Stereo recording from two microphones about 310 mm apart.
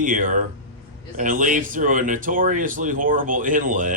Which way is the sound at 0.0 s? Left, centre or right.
Right.